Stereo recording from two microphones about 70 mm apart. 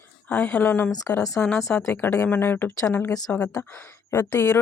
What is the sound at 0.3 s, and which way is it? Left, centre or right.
A woman's voice, left.